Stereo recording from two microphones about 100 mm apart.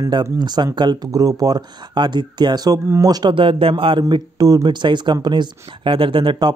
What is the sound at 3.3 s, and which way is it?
Speech, 65° right (ahead or behind).